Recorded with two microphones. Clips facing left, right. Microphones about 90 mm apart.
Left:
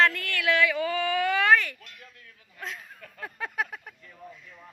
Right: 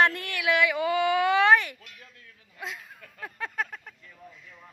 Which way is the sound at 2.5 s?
5° right (ahead or behind).